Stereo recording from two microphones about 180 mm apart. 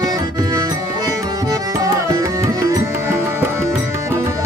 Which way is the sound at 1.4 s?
20° right (ahead or behind).